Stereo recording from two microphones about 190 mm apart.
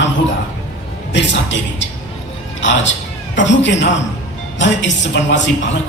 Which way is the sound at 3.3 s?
70° left (ahead or behind).